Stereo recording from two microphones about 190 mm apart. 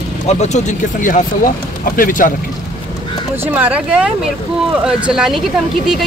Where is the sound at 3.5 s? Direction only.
10° right (ahead or behind).